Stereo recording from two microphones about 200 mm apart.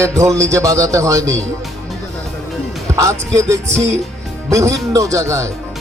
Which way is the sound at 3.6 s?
35° right (ahead or behind).